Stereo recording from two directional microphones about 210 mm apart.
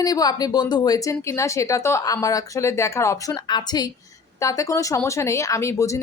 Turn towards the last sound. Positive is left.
turn(degrees=15)  # may be behind; listen again after turning